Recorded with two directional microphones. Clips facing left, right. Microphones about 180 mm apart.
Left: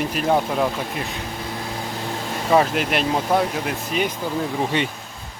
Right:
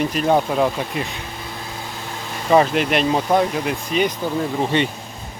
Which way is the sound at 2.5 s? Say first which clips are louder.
Right 3 dB; centre (ahead or behind).